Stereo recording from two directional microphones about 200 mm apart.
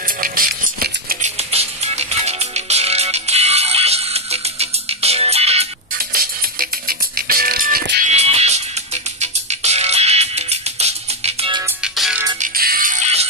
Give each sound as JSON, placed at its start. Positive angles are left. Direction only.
{"t": 0.0, "sound": "a sound", "side_deg": -45}
{"t": 1.3, "sound": "music", "side_deg": -30}
{"t": 5.9, "sound": "music", "side_deg": -45}
{"t": 8.1, "sound": "music", "side_deg": -30}
{"t": 11.6, "sound": "music", "side_deg": -5}
{"t": 12.4, "sound": "music", "side_deg": -45}